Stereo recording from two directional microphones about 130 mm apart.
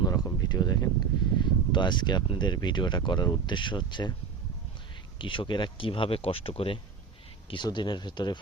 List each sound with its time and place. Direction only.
0.0 s a sound: 30° left (ahead or behind)
1.4 s speech: 35° left (ahead or behind)
5.2 s speech: 40° left (ahead or behind)